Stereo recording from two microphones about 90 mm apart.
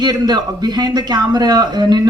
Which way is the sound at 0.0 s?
50° right (ahead or behind).